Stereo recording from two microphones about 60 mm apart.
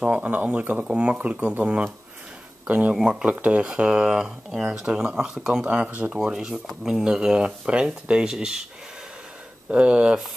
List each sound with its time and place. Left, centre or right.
0.0 s speech: right
2.9 s speech: centre
9.7 s speech: right